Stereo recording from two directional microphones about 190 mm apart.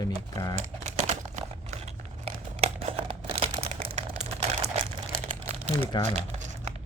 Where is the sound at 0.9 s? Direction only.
35° right (ahead or behind).